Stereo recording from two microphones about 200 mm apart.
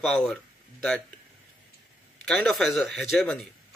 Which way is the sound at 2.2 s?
Centre (ahead or behind).